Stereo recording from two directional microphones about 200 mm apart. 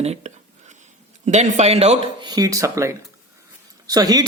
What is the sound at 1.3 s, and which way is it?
Speech, 35° right (ahead or behind).